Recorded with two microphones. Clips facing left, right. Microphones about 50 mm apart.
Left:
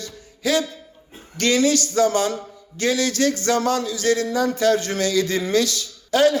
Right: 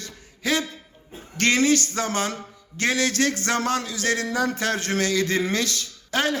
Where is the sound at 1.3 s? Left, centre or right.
Right.